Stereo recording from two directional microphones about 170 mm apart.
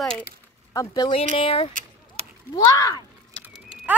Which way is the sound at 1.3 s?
35° left (ahead or behind).